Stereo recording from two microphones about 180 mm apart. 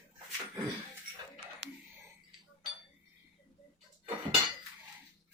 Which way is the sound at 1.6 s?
70° right (ahead or behind).